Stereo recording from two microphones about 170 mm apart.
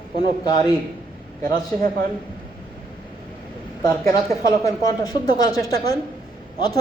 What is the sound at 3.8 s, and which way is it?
A man's voice, 20° left (ahead or behind).